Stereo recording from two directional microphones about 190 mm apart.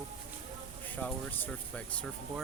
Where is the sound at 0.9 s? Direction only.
10° left (ahead or behind).